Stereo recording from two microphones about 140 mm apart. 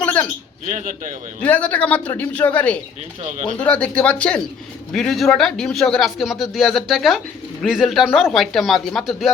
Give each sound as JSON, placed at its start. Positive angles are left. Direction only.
{"t": 0.0, "sound": "bird", "side_deg": 10}
{"t": 0.7, "sound": "a man's voice", "side_deg": -65}
{"t": 1.4, "sound": "a man's voice", "side_deg": 10}